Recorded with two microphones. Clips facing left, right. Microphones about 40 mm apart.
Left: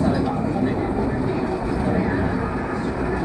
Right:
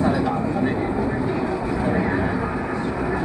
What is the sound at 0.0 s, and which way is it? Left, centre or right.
Vehicle, right.